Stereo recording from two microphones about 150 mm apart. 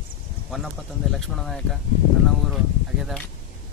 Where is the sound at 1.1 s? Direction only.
Centre (ahead or behind).